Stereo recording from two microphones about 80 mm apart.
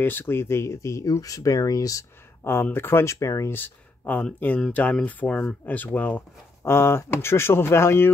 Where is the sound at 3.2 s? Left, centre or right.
Left.